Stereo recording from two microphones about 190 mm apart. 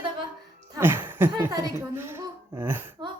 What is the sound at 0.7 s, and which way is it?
Speech, 10° right (ahead or behind).